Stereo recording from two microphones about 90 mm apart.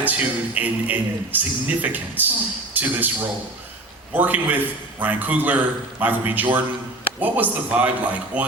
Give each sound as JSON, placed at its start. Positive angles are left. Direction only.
{"t": 0.0, "sound": "a man's voice", "side_deg": -20}